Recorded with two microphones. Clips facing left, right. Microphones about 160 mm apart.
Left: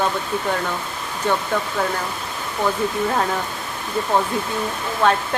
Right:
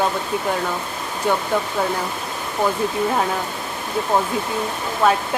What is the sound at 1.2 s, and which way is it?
Speech, 15° right (ahead or behind).